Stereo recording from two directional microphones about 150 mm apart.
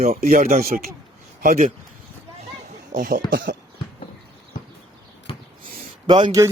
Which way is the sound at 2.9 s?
65° right (ahead or behind).